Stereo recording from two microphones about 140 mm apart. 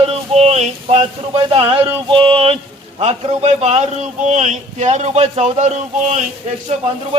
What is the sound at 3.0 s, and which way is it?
A man's voice, 50° right (ahead or behind).